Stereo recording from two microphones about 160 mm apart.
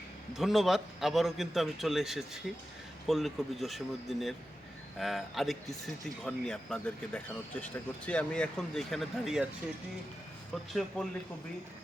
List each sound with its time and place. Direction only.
0.3 s speech: centre (ahead or behind)
10.5 s speech: centre (ahead or behind)